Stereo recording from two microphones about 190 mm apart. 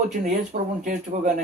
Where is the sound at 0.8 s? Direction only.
45° right (ahead or behind).